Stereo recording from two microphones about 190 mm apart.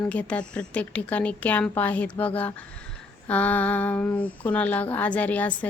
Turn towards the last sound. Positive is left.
turn(degrees=10)  # may be behind; listen again after turning